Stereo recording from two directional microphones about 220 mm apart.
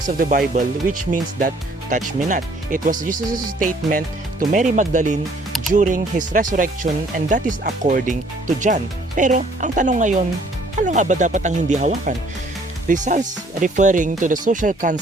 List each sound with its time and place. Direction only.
0.0 s speech: 40° right (ahead or behind)